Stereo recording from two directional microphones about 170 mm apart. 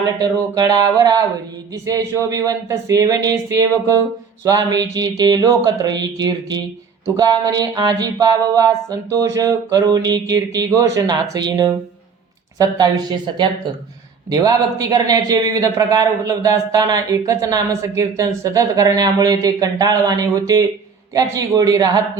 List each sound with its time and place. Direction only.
0.2 s speech: 20° right (ahead or behind)
2.2 s speech: 20° right (ahead or behind)